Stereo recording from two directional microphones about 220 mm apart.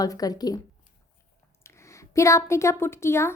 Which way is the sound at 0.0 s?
15° left (ahead or behind).